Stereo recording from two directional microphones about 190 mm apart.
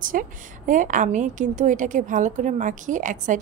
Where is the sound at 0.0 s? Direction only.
45° right (ahead or behind).